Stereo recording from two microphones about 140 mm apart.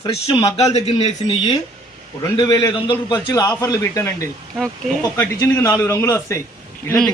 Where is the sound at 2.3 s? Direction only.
30° left (ahead or behind).